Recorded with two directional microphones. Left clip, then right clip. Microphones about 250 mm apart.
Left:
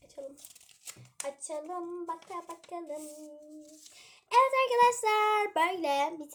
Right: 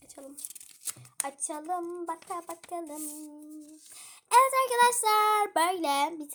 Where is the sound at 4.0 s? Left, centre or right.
Right.